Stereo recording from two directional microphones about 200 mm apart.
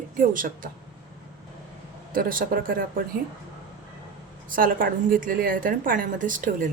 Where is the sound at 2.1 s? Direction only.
45° right (ahead or behind).